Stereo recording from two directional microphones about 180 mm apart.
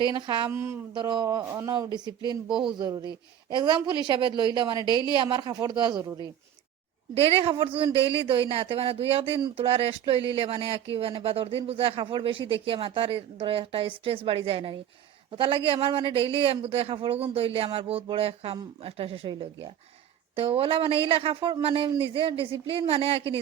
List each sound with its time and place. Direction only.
0.2 s a woman's voice: 25° right (ahead or behind)
0.5 s speech: 15° right (ahead or behind)
0.9 s a woman's voice: 25° right (ahead or behind)
4.9 s a woman's voice: 20° left (ahead or behind)
5.1 s a woman's voice: 25° right (ahead or behind)
7.1 s speech: 35° right (ahead or behind)